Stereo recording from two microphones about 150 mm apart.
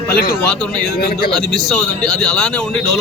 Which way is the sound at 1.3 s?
Centre (ahead or behind).